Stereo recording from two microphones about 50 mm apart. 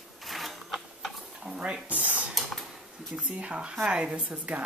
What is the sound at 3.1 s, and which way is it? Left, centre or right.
A woman's voice, right.